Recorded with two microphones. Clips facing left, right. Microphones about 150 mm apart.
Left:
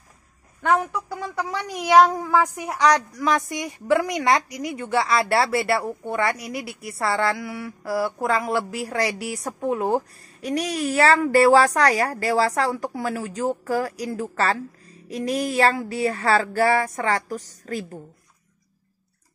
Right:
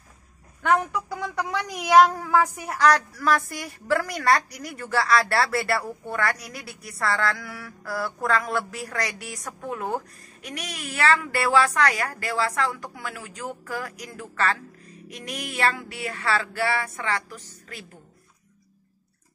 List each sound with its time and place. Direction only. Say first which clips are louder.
0.6 s speech: left 1 dB; 10° left (ahead or behind); by 6.3 s 25° left (ahead or behind)
7.0 s mantra: left 3 dB; 25° left (ahead or behind)